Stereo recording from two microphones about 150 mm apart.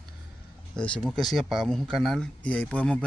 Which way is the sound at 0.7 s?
5° left (ahead or behind).